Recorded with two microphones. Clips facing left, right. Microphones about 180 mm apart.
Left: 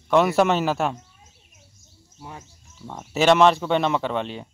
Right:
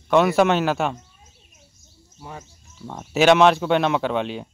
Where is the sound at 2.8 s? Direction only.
Centre (ahead or behind).